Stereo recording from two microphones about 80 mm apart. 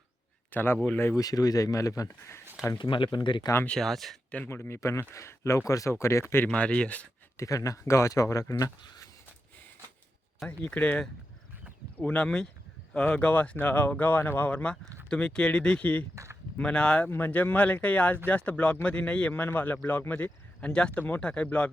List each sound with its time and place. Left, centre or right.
0.5 s speech: left
1.1 s speech: left
2.7 s speech: left
3.7 s speech: centre
4.4 s speech: left
6.4 s speech: centre
7.3 s speech: left
10.4 s speech: centre
16.1 s a sound: right
16.6 s speech: centre
17.1 s speech: left
20.6 s speech: centre